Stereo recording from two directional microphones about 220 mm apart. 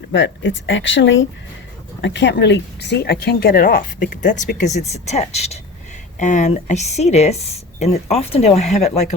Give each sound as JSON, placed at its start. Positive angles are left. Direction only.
{"t": 0.1, "sound": "speech", "side_deg": 55}